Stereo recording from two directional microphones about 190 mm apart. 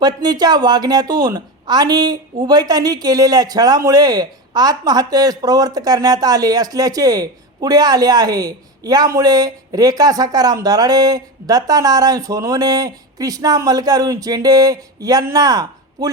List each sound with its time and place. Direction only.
0.0 s speech: 20° right (ahead or behind)